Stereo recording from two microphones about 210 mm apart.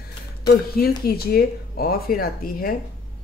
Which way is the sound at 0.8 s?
45° left (ahead or behind).